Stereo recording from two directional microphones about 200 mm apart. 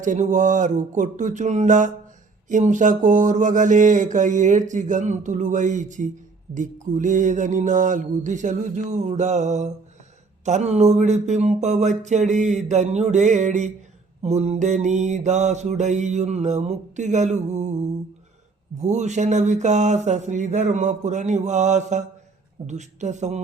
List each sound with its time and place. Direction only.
0.0 s mantra: 40° right (ahead or behind)